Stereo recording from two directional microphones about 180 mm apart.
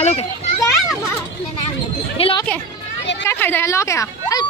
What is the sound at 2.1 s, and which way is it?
Speech, 30° left (ahead or behind).